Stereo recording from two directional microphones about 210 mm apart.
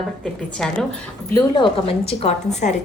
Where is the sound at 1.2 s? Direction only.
20° left (ahead or behind).